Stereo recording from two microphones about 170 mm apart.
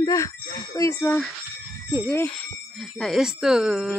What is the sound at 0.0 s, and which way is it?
Speech, 20° left (ahead or behind).